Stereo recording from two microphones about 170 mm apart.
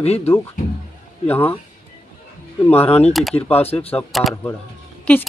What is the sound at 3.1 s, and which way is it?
Speech, centre (ahead or behind).